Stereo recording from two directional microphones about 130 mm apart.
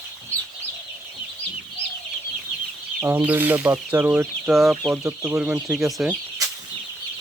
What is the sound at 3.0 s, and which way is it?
Speech, 10° right (ahead or behind).